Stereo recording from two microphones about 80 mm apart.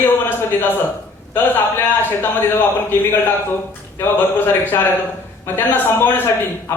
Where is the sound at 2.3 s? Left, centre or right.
Left.